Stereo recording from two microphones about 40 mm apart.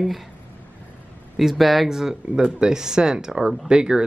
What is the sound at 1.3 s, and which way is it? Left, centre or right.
Speech, centre.